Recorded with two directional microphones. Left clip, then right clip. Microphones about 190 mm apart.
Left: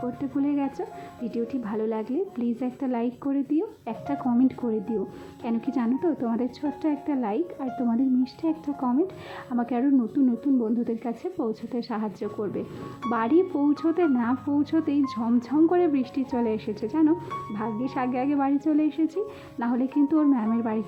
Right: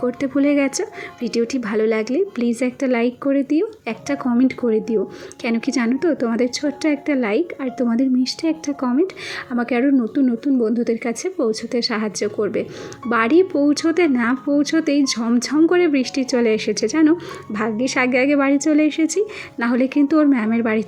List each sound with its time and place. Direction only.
0.2 s speech: 20° right (ahead or behind)